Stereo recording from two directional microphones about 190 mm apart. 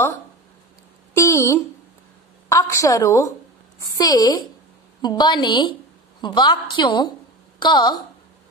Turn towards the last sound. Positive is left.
turn(degrees=20)  # may be behind; listen again after turning